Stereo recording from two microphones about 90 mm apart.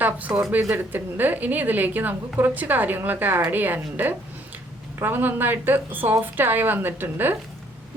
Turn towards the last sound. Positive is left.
turn(degrees=-25)  # may be behind; listen again after turning